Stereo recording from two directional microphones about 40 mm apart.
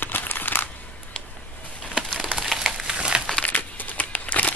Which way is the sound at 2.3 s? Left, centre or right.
Centre.